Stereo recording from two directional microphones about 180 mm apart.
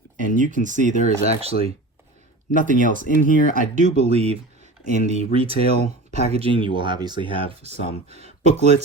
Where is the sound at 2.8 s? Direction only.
50° left (ahead or behind).